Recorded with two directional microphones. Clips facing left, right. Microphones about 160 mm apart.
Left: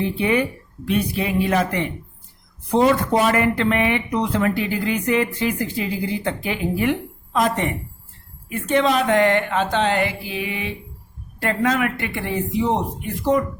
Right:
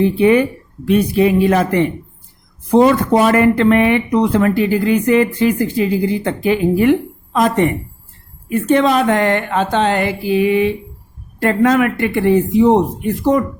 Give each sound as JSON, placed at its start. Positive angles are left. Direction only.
{"t": 0.0, "sound": "speech", "side_deg": -50}